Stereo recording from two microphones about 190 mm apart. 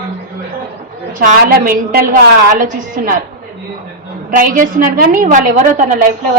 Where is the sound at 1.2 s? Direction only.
45° right (ahead or behind).